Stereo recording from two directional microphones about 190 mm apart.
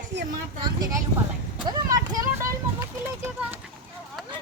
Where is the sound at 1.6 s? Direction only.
20° right (ahead or behind).